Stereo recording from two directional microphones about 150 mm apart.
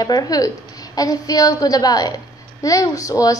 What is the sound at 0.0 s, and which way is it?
A child's voice, 25° left (ahead or behind).